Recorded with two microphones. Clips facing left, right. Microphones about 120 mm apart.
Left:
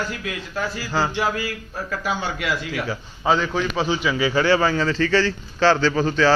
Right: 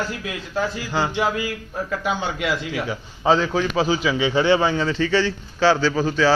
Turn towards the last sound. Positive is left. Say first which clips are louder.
# even
turn(degrees=-10)  # may be behind; listen again after turning